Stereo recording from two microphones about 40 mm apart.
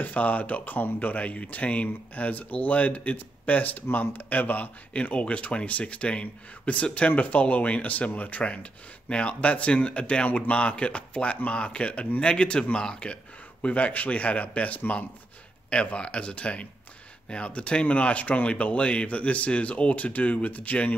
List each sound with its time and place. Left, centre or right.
0.0 s speech: left
4.9 s speech: left
15.7 s speech: left